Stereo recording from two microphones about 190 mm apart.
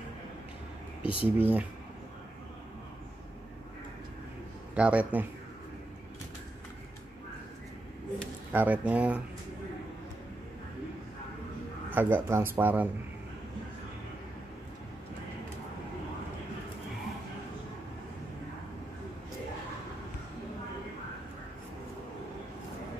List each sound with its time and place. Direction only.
1.0 s speech: 25° left (ahead or behind)
1.4 s a man's voice: 10° right (ahead or behind)
4.7 s a man's voice: 5° right (ahead or behind)
8.5 s a man's voice: 10° right (ahead or behind)
11.9 s a man's voice: 10° right (ahead or behind)